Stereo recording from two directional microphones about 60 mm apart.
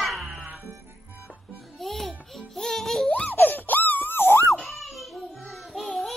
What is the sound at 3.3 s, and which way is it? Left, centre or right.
Wail, left.